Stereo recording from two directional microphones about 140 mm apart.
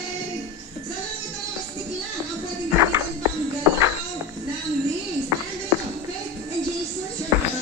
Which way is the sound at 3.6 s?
20° right (ahead or behind).